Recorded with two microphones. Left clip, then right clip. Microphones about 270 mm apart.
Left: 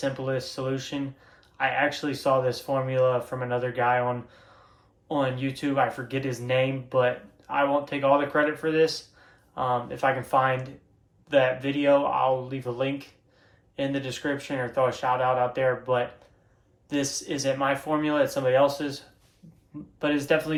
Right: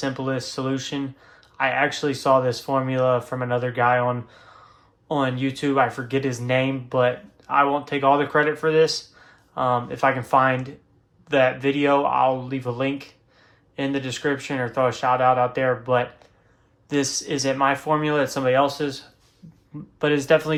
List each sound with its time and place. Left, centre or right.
0.0 s speech: right
20.0 s speech: right